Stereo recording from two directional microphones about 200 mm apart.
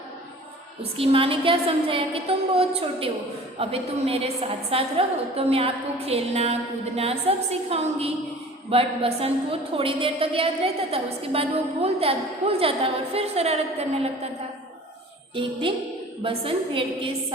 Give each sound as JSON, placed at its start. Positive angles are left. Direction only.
{"t": 0.8, "sound": "a woman's voice", "side_deg": -30}
{"t": 16.2, "sound": "a woman's voice", "side_deg": -25}